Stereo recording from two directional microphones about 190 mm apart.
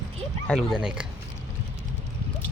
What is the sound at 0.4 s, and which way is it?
Speech, centre (ahead or behind).